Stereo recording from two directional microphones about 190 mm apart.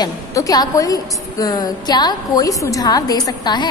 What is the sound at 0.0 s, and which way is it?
A woman's voice, 20° left (ahead or behind).